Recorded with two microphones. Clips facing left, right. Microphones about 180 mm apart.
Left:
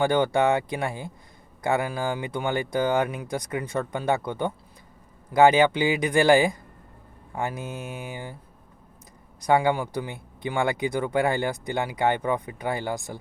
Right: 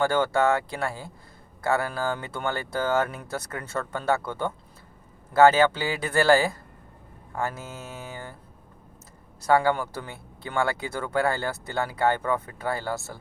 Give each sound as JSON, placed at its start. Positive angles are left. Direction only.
{"t": 0.0, "sound": "speech", "side_deg": 15}
{"t": 9.4, "sound": "speech", "side_deg": 15}